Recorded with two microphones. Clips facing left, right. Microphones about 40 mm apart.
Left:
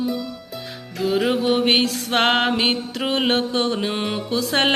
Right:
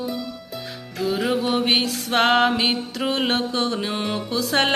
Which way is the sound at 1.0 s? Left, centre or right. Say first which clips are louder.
Left 3 dB; centre.